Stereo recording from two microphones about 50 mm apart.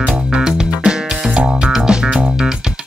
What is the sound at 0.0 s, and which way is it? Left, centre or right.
Music, centre.